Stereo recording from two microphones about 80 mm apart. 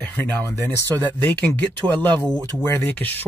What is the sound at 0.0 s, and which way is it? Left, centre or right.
Speech, left.